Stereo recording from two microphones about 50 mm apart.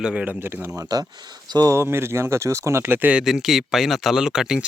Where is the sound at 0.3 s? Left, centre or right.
Right.